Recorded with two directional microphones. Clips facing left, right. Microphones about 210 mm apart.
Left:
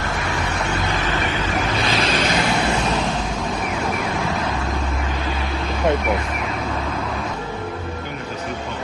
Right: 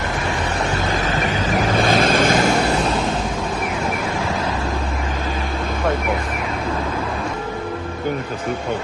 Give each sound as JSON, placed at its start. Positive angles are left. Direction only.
{"t": 1.6, "sound": "vehicle", "side_deg": -50}